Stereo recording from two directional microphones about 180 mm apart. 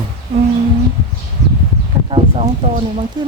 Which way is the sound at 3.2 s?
25° right (ahead or behind).